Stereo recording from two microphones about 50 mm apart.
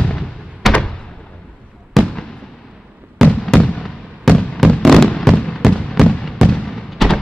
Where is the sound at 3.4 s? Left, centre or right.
Centre.